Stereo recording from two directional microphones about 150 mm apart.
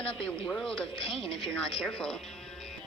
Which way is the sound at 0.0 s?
Centre (ahead or behind).